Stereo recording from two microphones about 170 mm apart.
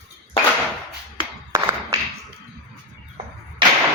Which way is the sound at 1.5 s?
20° right (ahead or behind).